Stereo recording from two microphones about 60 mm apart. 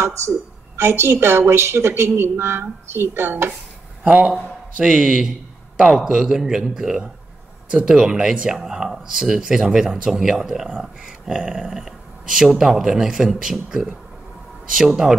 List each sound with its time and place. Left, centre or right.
0.0 s a woman's voice: right
4.0 s speech: right